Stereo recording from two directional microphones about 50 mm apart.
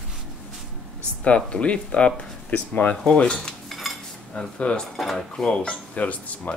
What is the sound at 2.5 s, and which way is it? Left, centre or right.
Speech, left.